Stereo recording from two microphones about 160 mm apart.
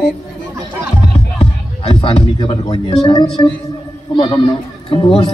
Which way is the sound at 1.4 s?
35° left (ahead or behind).